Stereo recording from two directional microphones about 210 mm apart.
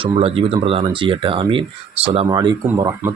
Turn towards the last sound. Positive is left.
turn(degrees=-15)  # may be behind; listen again after turning